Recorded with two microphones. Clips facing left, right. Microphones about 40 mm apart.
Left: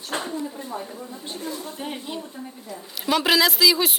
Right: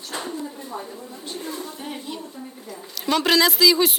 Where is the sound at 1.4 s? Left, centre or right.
Right.